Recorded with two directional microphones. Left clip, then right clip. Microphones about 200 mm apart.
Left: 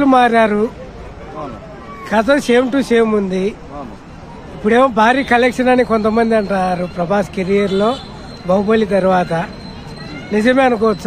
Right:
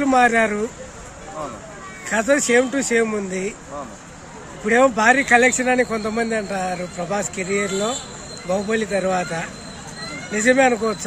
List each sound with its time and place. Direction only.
0.0 s speech: 15° left (ahead or behind)
2.0 s speech: 15° left (ahead or behind)
4.6 s speech: 15° left (ahead or behind)